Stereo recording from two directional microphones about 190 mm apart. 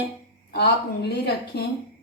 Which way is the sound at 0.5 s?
60° left (ahead or behind).